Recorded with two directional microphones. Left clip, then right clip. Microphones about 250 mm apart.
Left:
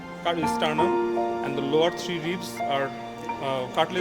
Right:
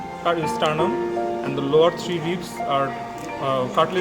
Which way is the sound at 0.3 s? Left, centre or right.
Left.